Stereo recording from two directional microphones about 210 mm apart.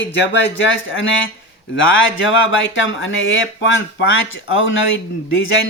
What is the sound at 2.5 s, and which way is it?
Speech, 65° left (ahead or behind).